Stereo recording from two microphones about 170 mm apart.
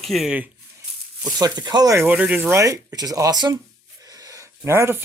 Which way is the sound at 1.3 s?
25° right (ahead or behind).